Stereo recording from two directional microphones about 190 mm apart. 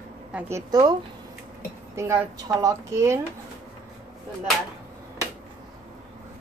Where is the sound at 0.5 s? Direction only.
20° right (ahead or behind).